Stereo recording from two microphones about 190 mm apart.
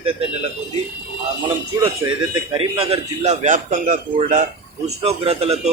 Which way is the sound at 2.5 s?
30° right (ahead or behind).